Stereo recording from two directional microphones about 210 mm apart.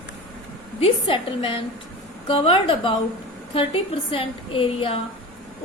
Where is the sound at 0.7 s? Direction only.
25° left (ahead or behind).